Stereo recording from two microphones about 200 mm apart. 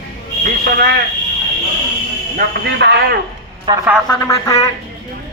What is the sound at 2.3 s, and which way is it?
Speech, 55° right (ahead or behind).